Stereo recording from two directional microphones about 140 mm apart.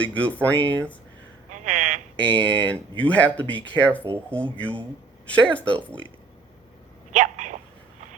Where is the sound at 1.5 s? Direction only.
60° right (ahead or behind).